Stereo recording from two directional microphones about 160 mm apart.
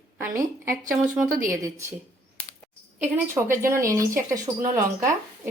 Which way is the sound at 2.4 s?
10° left (ahead or behind).